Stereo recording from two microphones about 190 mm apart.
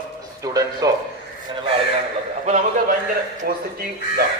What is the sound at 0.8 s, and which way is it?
Speech, 20° right (ahead or behind).